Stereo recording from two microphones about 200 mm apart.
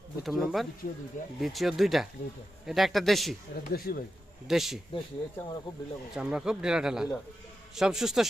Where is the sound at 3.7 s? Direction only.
50° left (ahead or behind).